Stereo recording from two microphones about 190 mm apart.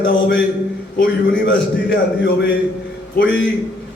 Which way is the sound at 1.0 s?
70° left (ahead or behind).